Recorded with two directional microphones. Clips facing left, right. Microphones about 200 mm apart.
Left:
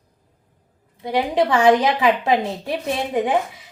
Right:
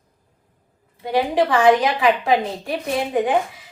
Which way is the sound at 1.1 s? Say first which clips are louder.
Even; 20° left (ahead or behind).